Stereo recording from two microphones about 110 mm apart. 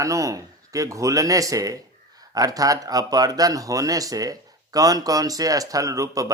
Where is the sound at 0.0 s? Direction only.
30° right (ahead or behind).